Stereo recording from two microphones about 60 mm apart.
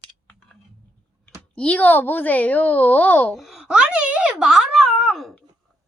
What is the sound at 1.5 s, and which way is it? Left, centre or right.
Speech, left.